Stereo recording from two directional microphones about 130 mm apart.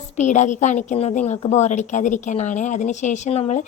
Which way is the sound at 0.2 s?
65° left (ahead or behind).